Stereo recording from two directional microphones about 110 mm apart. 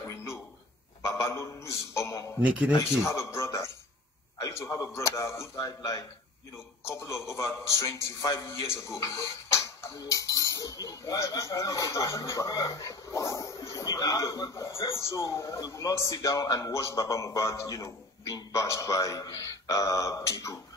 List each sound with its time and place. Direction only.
0.1 s a sound: 25° left (ahead or behind)
2.4 s speech: 10° right (ahead or behind)
3.0 s a sound: 25° left (ahead or behind)
4.4 s a man's voice: 30° left (ahead or behind)
5.7 s a man's voice: 35° left (ahead or behind)
6.8 s a man's voice: 25° left (ahead or behind)